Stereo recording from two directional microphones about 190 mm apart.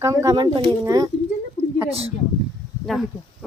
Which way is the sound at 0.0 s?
15° right (ahead or behind).